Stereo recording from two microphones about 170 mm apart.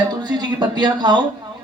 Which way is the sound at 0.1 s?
25° right (ahead or behind).